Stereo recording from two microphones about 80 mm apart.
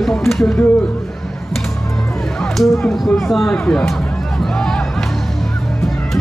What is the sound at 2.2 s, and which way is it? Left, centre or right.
Speech, centre.